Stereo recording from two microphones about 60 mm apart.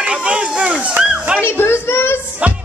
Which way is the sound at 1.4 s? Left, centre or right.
Left.